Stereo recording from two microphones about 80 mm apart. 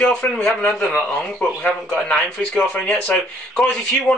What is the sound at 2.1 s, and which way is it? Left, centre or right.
Speech, centre.